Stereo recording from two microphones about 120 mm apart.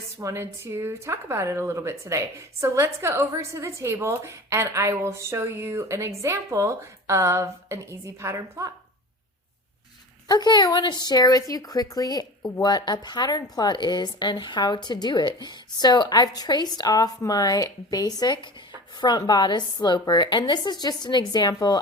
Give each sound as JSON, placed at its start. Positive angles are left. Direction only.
{"t": 0.2, "sound": "a woman's voice", "side_deg": -25}
{"t": 10.2, "sound": "a woman's voice", "side_deg": 35}